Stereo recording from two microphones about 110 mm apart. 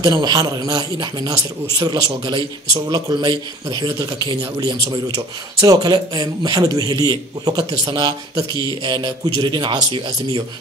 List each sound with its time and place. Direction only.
0.0 s speech: 35° right (ahead or behind)